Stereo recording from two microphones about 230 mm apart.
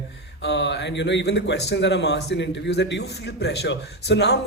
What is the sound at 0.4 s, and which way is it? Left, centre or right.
Speech, left.